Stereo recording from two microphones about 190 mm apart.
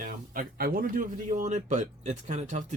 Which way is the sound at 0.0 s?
50° right (ahead or behind).